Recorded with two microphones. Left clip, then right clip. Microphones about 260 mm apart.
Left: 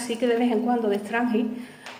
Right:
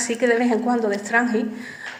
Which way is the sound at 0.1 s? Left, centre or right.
Right.